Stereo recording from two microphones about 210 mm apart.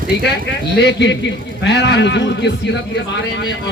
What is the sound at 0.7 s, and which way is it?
Speech, 55° left (ahead or behind).